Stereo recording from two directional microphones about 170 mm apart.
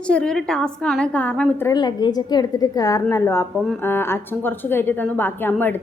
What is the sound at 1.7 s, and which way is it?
A woman's voice, 25° left (ahead or behind).